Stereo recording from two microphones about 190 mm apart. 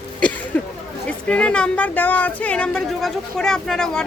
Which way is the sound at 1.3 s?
5° left (ahead or behind).